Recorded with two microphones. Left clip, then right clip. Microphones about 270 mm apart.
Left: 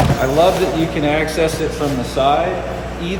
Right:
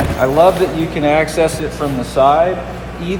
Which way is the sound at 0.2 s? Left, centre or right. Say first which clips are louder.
Right 4 dB; centre.